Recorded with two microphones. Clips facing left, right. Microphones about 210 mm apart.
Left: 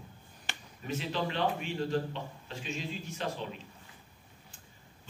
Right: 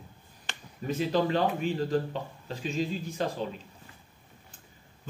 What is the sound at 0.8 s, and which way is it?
A man's voice, 40° right (ahead or behind).